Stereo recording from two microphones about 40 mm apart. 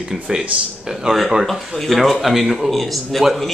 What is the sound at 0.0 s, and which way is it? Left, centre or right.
Speech, centre.